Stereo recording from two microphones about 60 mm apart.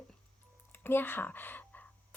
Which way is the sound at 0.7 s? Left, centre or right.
Left.